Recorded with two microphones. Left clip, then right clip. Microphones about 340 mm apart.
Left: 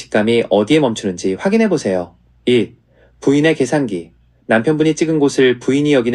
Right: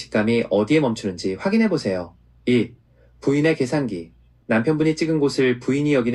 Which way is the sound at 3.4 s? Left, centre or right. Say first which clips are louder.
Left 6 dB; left.